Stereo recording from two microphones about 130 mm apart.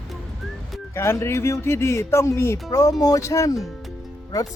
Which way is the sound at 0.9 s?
20° left (ahead or behind).